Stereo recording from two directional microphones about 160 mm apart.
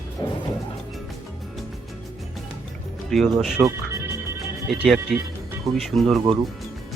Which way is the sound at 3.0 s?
Centre (ahead or behind).